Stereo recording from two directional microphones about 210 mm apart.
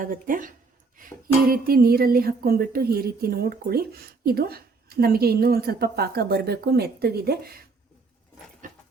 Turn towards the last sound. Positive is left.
turn(degrees=-45)  # may be behind; listen again after turning